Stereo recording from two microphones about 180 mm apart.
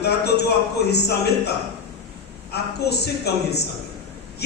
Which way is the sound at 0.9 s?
65° left (ahead or behind).